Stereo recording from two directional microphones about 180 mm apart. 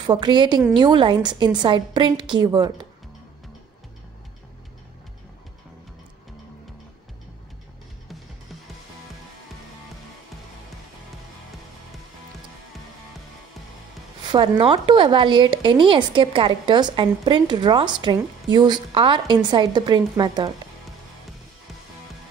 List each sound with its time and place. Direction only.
0.0 s a woman's voice: 25° right (ahead or behind)
14.3 s a woman's voice: 30° right (ahead or behind)